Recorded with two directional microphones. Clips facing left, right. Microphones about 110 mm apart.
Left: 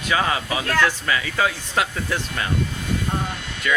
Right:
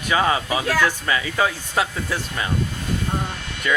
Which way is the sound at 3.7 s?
25° right (ahead or behind).